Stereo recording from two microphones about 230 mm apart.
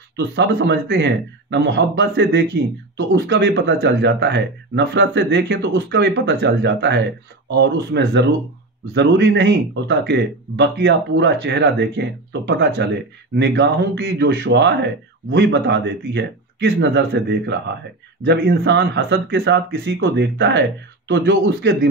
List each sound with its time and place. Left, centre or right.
0.4 s speech: right